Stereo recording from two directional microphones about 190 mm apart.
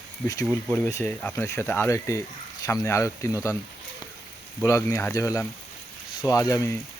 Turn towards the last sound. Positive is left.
turn(degrees=15)  # may be behind; listen again after turning